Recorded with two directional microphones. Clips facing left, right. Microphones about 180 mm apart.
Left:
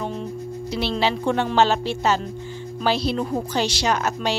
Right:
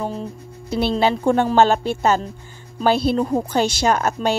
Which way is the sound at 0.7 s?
50° right (ahead or behind).